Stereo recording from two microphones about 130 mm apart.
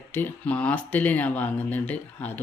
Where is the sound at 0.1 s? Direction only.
15° left (ahead or behind).